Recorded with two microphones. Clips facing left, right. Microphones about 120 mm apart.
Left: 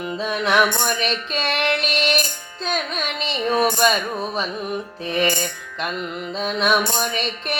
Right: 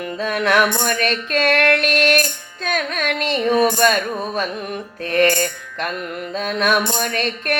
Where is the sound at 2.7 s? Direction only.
55° right (ahead or behind).